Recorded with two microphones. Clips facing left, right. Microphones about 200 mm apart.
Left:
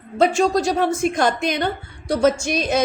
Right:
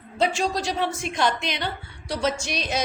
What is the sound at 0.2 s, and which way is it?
A woman's voice, 50° left (ahead or behind).